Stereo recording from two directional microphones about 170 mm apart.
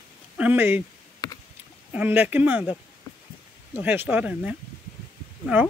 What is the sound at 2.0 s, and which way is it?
Speech, 10° right (ahead or behind).